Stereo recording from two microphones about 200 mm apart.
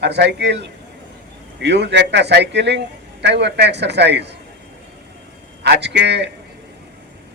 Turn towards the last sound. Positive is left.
turn(degrees=-60)  # may be behind; listen again after turning